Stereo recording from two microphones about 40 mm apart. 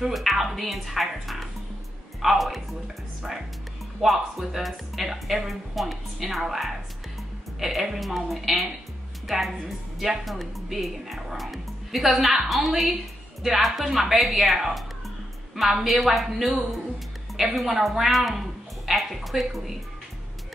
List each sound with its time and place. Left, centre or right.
0.1 s speech: centre
3.2 s speech: centre
9.9 s a woman's voice: centre
17.6 s a woman's voice: centre